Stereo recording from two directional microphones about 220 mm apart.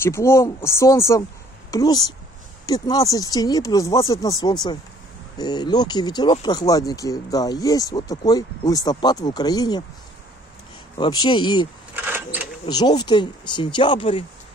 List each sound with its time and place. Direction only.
0.0 s speech: 10° left (ahead or behind)
11.0 s speech: 20° left (ahead or behind)
11.9 s a sound: 10° right (ahead or behind)
12.6 s speech: 20° left (ahead or behind)